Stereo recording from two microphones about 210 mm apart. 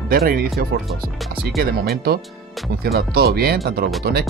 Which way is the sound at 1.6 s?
45° right (ahead or behind).